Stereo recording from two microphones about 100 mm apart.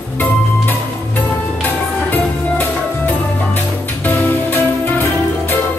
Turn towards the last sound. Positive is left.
turn(degrees=20)  # may be behind; listen again after turning